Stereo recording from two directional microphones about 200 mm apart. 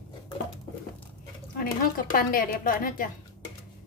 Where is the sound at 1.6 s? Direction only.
45° left (ahead or behind).